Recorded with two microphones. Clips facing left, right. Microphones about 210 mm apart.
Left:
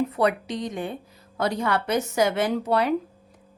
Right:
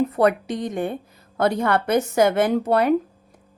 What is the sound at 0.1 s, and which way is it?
A woman's voice, 50° right (ahead or behind).